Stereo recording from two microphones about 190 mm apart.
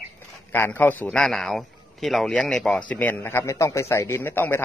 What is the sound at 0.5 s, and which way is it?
A man's voice, 10° left (ahead or behind).